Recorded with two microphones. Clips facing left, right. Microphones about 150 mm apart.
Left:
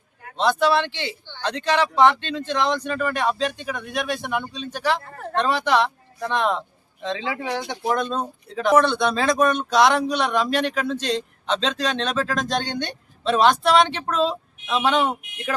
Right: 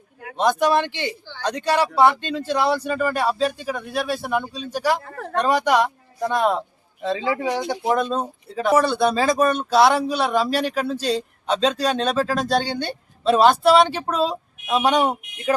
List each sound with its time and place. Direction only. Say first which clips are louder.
0.3 s speech: right 1 dB; 15° right (ahead or behind)
7.9 s speech: right 2 dB; 5° right (ahead or behind)